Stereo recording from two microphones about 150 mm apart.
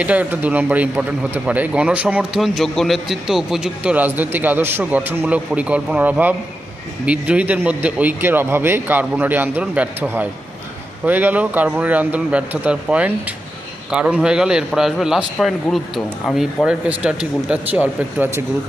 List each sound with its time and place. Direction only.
0.0 s a man's voice: 10° right (ahead or behind)